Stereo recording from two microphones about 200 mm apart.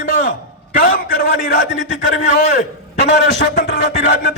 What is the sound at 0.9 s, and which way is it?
A man's voice, 55° left (ahead or behind).